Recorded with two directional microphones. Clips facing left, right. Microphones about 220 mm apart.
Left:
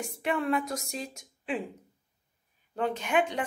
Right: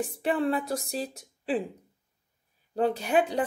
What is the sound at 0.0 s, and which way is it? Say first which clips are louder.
A woman's voice: right 4 dB; 35° right (ahead or behind).